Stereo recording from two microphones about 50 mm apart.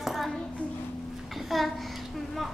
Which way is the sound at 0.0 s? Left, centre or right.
Centre.